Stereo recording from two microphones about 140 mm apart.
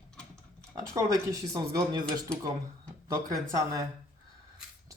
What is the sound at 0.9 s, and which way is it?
Speech, 25° right (ahead or behind).